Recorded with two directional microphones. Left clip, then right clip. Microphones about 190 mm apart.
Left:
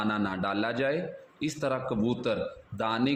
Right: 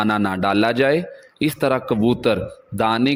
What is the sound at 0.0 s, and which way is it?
A man's voice, 55° right (ahead or behind).